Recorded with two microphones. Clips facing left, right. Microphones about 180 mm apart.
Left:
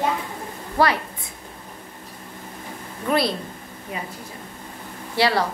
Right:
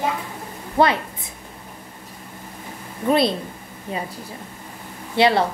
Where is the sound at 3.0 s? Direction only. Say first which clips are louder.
Right 3 dB; 20° right (ahead or behind).